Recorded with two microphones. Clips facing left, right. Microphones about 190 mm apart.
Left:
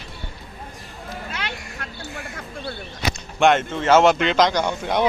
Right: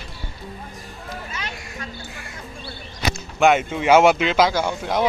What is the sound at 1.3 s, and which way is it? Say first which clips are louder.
Music: left 2 dB; 70° left (ahead or behind).